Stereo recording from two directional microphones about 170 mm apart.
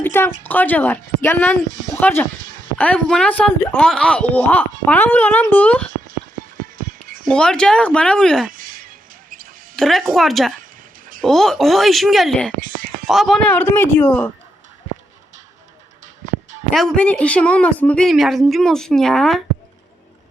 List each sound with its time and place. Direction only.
0.0 s a sound: 10° left (ahead or behind)
0.4 s a woman's voice: 10° left (ahead or behind)
1.6 s speech: 50° right (ahead or behind)
2.0 s a woman's voice: 10° left (ahead or behind)
6.6 s music: 50° right (ahead or behind)
7.3 s speech: 5° left (ahead or behind)
8.4 s a sound: 55° right (ahead or behind)
9.3 s music: 55° right (ahead or behind)
9.7 s speech: centre (ahead or behind)
10.6 s a sound: 55° right (ahead or behind)
11.2 s speech: centre (ahead or behind)
12.5 s a sound: 55° right (ahead or behind)
13.1 s a woman's voice: centre (ahead or behind)
16.7 s speech: 5° left (ahead or behind)